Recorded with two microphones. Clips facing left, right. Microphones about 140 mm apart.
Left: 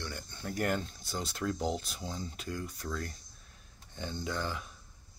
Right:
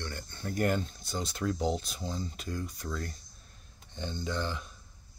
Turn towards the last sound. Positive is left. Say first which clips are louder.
# right 2 dB
turn(degrees=5)  # may be behind; listen again after turning